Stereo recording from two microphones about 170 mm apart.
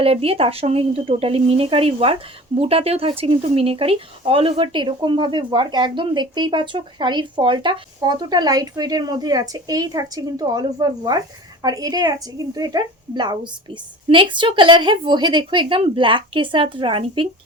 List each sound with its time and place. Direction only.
0.0 s speech: 35° right (ahead or behind)